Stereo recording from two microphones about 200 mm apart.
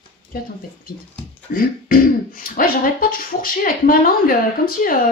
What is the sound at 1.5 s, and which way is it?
Speech, 45° left (ahead or behind).